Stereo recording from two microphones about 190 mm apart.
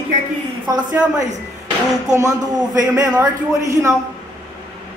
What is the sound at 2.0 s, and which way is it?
A man's voice, 20° right (ahead or behind).